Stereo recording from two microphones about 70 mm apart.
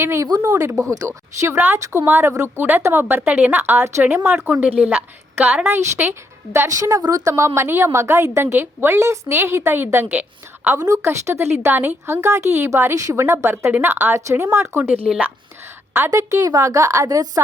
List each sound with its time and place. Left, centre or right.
0.0 s a woman's voice: right
0.3 s speech: right
0.5 s a woman's voice: right
1.5 s a woman's voice: right
4.6 s a woman's voice: centre
5.6 s a woman's voice: right
6.7 s a woman's voice: right
10.8 s a woman's voice: right
11.0 s a woman's voice: right
13.7 s a woman's voice: right
16.0 s a woman's voice: right